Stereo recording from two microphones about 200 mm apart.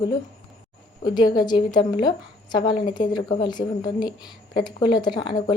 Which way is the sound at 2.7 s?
25° left (ahead or behind).